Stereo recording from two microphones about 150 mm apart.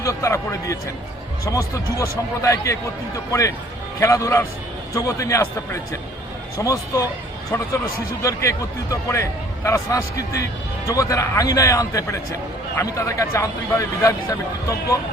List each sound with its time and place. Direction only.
0.0 s a man's voice: 20° left (ahead or behind)
4.0 s a man's voice: 20° left (ahead or behind)